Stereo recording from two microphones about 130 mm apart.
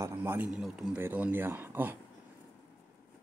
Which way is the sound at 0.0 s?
20° right (ahead or behind).